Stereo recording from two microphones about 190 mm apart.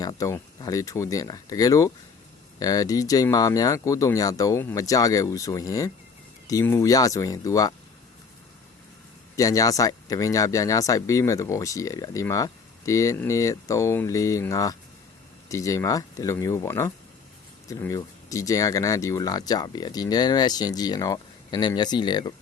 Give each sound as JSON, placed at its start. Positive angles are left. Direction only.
{"t": 0.0, "sound": "speech", "side_deg": 20}
{"t": 9.3, "sound": "speech", "side_deg": 20}